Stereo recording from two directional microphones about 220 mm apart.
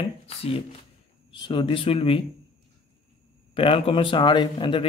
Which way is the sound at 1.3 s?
20° left (ahead or behind).